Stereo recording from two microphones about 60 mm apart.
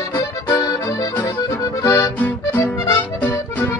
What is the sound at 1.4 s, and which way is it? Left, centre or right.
Accordion, left.